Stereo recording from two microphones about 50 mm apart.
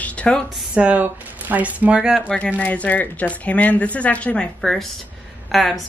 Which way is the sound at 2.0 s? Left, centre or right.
Right.